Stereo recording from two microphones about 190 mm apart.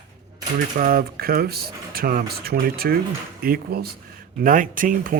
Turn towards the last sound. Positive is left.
turn(degrees=-45)  # may be behind; listen again after turning